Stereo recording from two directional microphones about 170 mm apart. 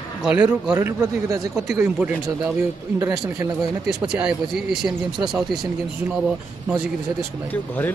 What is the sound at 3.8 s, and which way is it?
Speech, 5° right (ahead or behind).